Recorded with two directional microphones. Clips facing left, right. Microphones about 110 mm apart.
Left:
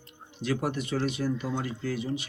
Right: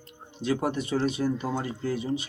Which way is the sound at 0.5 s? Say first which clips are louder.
Right 2 dB; 35° right (ahead or behind).